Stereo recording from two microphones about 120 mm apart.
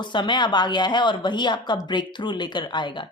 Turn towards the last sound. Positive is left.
turn(degrees=40)  # may be behind; listen again after turning